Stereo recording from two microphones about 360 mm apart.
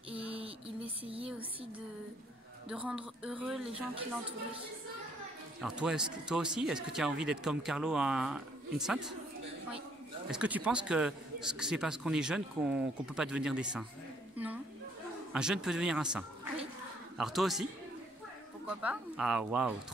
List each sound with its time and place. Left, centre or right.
0.1 s a sound: centre
1.0 s speech: centre
2.7 s a man's voice: centre
5.6 s a man's voice: centre
10.3 s a man's voice: centre
14.3 s a sound: centre
15.3 s a man's voice: centre
18.7 s a man's voice: centre